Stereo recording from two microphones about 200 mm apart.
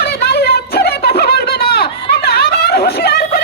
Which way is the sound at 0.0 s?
55° left (ahead or behind).